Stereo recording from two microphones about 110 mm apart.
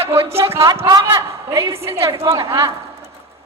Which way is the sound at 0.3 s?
25° right (ahead or behind).